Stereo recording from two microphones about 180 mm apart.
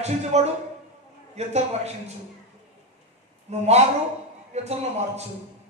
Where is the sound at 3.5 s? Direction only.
35° right (ahead or behind).